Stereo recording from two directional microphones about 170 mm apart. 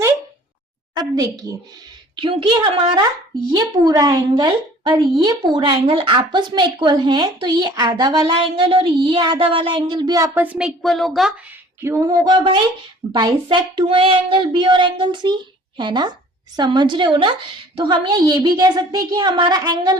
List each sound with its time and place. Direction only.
0.9 s speech: 20° right (ahead or behind)
2.1 s a woman's voice: 30° right (ahead or behind)
3.5 s speech: 25° right (ahead or behind)
10.3 s speech: 10° right (ahead or behind)
10.8 s a woman's voice: centre (ahead or behind)
11.8 s speech: 15° right (ahead or behind)